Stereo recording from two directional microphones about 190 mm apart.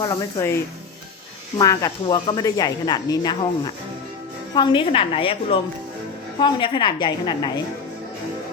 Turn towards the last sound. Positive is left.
turn(degrees=25)  # may be behind; listen again after turning